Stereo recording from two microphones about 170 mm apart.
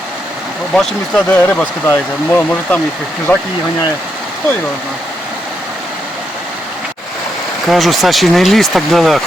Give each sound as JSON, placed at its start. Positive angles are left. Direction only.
{"t": 0.7, "sound": "speech", "side_deg": 5}
{"t": 7.7, "sound": "speech", "side_deg": 0}